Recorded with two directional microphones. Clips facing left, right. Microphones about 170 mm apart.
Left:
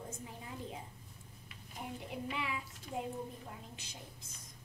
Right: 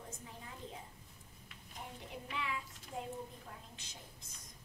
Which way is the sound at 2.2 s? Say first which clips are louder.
Left 2 dB; 10° left (ahead or behind).